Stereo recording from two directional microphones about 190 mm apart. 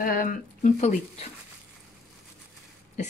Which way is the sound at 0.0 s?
50° left (ahead or behind).